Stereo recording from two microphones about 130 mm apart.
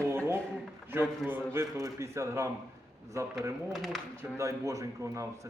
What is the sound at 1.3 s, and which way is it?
A man's voice, 20° right (ahead or behind).